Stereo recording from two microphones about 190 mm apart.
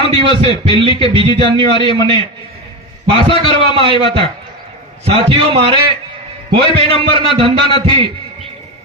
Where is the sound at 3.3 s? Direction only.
25° left (ahead or behind).